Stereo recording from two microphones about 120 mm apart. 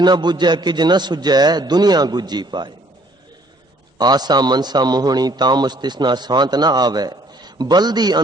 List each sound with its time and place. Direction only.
0.0 s a man's voice: 40° right (ahead or behind)
3.9 s a man's voice: 35° right (ahead or behind)